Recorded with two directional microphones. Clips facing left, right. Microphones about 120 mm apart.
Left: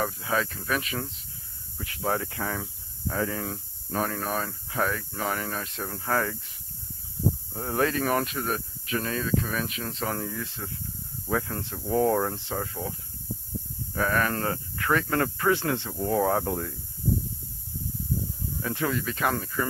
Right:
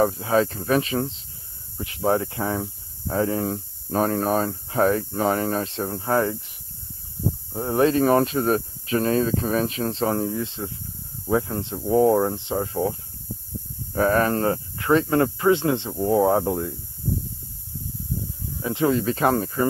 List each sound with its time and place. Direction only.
0.0 s speech: 35° right (ahead or behind)
7.5 s speech: 20° right (ahead or behind)
13.9 s speech: 30° right (ahead or behind)
18.6 s speech: 20° right (ahead or behind)